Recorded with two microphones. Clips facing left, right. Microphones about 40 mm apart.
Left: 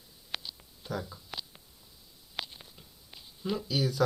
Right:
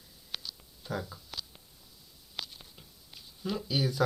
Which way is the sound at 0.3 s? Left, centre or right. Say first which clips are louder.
Left 2 dB; centre.